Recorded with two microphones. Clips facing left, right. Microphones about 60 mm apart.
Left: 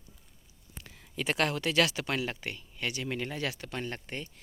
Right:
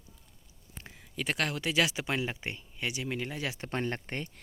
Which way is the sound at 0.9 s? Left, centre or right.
Centre.